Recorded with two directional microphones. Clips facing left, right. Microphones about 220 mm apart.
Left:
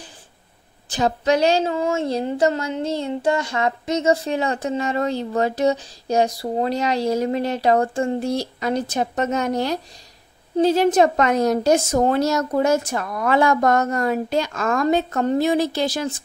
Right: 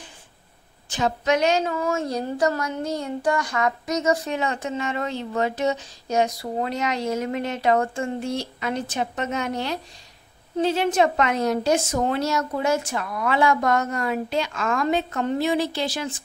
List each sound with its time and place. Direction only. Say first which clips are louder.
0.8 s a woman's voice: left 3 dB; 35° left (ahead or behind)